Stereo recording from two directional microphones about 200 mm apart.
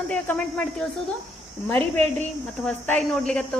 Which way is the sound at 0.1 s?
5° left (ahead or behind).